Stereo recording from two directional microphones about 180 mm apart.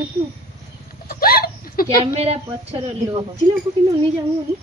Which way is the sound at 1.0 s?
55° left (ahead or behind).